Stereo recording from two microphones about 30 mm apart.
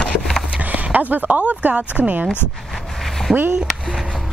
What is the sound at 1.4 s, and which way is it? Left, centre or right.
Speech, right.